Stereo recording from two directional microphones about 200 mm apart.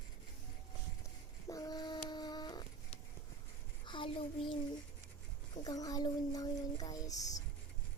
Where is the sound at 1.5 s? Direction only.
20° left (ahead or behind).